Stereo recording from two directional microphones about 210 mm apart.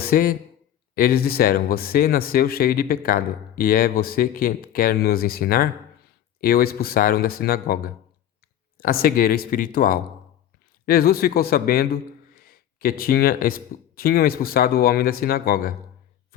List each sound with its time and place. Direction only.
0.0 s a man's voice: 45° left (ahead or behind)